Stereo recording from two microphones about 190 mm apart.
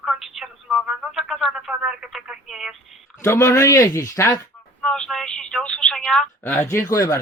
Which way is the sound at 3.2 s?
15° left (ahead or behind).